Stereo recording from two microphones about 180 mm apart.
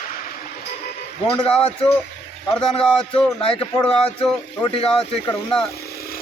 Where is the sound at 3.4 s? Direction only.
30° left (ahead or behind).